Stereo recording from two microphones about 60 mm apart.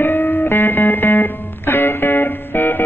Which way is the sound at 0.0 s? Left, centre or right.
Left.